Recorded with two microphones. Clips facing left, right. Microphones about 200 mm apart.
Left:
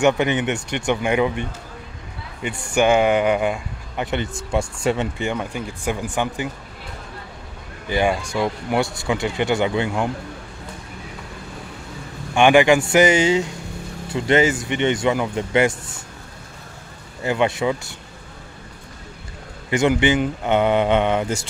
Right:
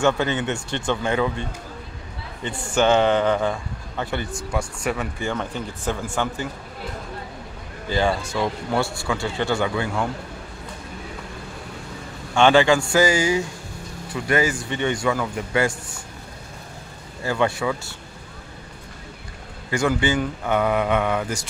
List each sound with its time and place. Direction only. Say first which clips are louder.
0.0 s speech: left 3 dB; 15° left (ahead or behind)
7.9 s speech: left 2 dB; 15° left (ahead or behind)
12.4 s speech: left 2 dB; 15° left (ahead or behind)
17.2 s speech: left 2 dB; 20° left (ahead or behind)
19.7 s speech: left 4 dB; 20° left (ahead or behind)